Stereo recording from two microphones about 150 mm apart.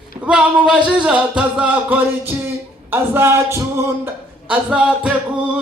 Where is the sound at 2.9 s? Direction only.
15° right (ahead or behind).